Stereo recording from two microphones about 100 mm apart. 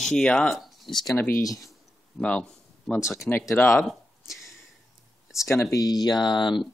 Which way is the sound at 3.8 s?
Centre (ahead or behind).